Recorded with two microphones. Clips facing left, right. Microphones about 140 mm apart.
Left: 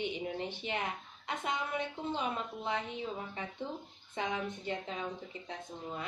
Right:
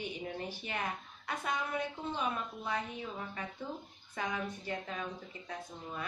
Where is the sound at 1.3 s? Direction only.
20° left (ahead or behind).